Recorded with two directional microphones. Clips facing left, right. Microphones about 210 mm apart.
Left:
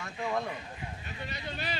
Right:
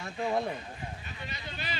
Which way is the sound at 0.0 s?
30° right (ahead or behind).